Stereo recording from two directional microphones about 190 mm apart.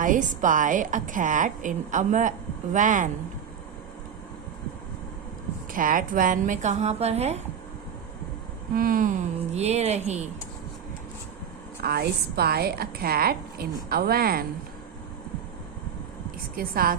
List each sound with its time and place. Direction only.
0.0 s a woman's voice: 45° right (ahead or behind)
5.7 s a woman's voice: 45° right (ahead or behind)
8.7 s a woman's voice: 50° right (ahead or behind)
9.6 s a woman's voice: 35° right (ahead or behind)
11.8 s a woman's voice: 55° right (ahead or behind)
16.6 s a woman's voice: 50° right (ahead or behind)